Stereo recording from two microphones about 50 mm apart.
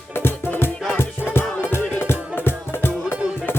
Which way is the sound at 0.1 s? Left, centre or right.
Left.